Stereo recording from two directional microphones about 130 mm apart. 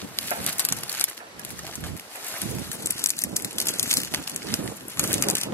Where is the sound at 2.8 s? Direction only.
20° left (ahead or behind).